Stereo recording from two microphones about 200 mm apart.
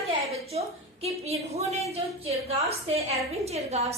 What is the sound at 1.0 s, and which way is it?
A woman's voice, 30° right (ahead or behind).